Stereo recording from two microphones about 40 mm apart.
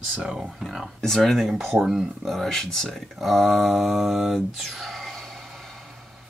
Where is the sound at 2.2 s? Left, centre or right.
Centre.